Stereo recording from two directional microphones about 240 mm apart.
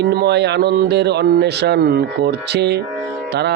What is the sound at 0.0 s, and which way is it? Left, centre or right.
A man's voice, right.